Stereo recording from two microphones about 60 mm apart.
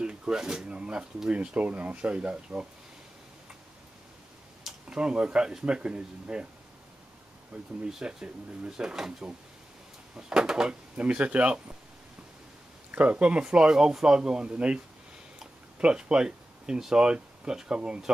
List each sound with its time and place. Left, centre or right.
0.0 s speech: centre
4.8 s speech: centre
7.8 s speech: centre
12.9 s speech: right
15.8 s speech: centre